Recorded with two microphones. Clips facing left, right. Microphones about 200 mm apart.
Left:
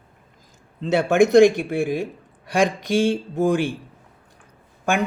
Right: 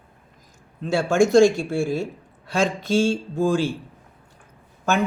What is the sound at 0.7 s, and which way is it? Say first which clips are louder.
Speech: left 2 dB; 20° left (ahead or behind).